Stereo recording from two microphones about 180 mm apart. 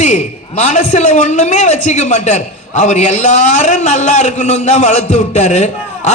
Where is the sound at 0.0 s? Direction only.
40° left (ahead or behind).